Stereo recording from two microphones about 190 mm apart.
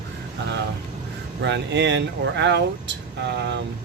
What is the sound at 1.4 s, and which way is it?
Speech, 70° right (ahead or behind).